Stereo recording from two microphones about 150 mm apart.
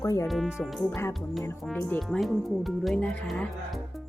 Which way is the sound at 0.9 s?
15° left (ahead or behind).